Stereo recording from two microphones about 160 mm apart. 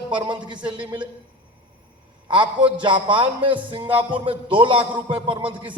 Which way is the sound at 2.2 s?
30° right (ahead or behind).